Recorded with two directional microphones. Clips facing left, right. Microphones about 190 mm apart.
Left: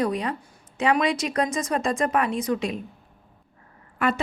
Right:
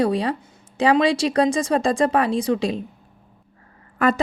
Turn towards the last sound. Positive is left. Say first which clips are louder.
# right 5 dB
turn(degrees=-40)  # may be behind; listen again after turning